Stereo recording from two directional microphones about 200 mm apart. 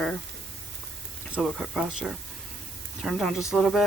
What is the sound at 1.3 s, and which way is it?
Speech, centre (ahead or behind).